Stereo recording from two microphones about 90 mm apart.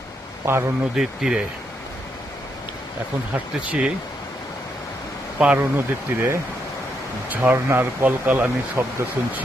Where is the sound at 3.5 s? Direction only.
5° right (ahead or behind).